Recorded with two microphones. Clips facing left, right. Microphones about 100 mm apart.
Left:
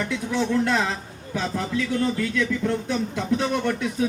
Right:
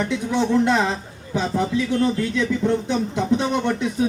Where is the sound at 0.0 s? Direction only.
20° right (ahead or behind).